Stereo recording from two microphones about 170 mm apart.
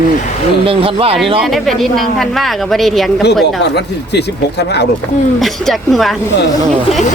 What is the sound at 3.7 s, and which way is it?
Speech, 75° left (ahead or behind).